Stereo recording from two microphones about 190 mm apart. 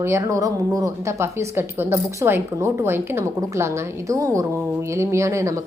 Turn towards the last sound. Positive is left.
turn(degrees=-15)  # may be behind; listen again after turning